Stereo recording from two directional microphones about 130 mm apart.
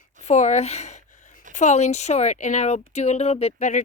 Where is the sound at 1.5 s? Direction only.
65° left (ahead or behind).